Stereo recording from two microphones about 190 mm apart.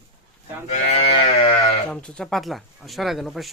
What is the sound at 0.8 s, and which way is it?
Livestock, 30° left (ahead or behind).